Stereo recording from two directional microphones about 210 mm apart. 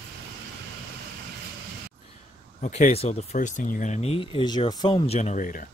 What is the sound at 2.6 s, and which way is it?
Speech, 35° left (ahead or behind).